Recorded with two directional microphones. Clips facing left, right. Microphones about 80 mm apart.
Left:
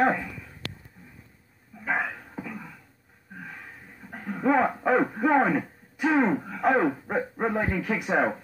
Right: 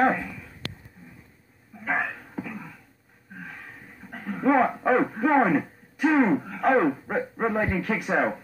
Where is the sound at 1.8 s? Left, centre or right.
Centre.